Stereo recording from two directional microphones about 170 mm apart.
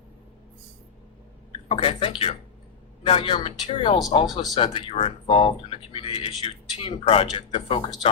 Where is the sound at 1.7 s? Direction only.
30° left (ahead or behind).